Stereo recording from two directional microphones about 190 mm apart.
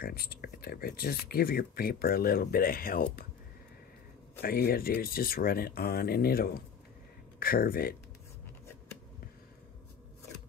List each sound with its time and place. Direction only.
0.0 s speech: 55° left (ahead or behind)
4.4 s speech: 50° left (ahead or behind)